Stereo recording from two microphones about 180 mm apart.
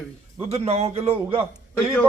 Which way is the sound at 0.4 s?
35° right (ahead or behind).